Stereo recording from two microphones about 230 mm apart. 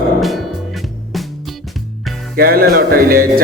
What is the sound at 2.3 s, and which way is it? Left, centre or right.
Music, right.